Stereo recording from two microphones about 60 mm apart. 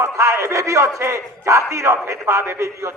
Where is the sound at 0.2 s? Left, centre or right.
Right.